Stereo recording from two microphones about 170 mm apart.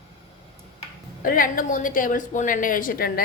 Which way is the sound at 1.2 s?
55° left (ahead or behind).